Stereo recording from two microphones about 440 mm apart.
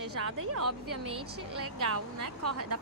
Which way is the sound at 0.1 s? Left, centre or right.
Right.